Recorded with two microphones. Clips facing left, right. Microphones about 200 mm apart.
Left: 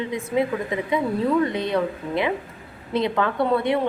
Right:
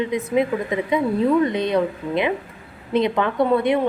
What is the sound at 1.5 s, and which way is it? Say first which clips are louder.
A woman's voice: right 3 dB; 20° right (ahead or behind).